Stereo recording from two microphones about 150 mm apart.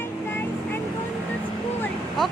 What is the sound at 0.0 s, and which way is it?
Vehicle, 15° left (ahead or behind).